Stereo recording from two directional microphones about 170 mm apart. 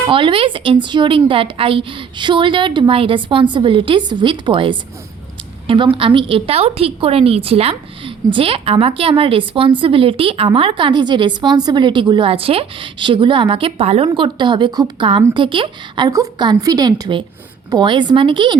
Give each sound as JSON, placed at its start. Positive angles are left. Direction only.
{"t": 0.1, "sound": "a woman's voice", "side_deg": -30}